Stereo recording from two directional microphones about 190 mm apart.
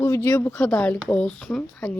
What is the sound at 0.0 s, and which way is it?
Speech, 15° left (ahead or behind).